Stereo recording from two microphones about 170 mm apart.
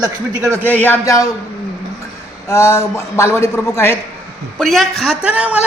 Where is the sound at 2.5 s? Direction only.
15° left (ahead or behind).